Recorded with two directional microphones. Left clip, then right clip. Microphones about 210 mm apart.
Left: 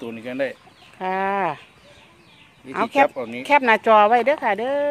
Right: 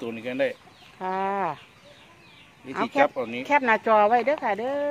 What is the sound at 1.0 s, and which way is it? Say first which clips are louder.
Speech: left 4 dB; 45° left (ahead or behind).